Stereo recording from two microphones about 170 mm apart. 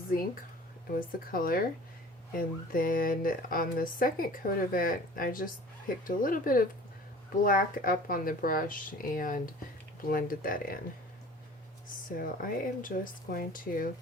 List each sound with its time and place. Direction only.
0.1 s speech: 60° left (ahead or behind)
12.1 s speech: 55° left (ahead or behind)